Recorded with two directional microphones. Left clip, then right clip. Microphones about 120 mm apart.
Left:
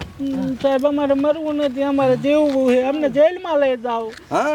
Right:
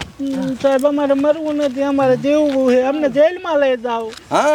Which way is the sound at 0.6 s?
10° right (ahead or behind).